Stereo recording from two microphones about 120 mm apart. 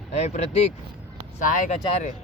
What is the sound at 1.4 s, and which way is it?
Speech, 80° left.